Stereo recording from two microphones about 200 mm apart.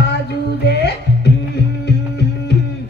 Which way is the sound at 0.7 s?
55° left (ahead or behind).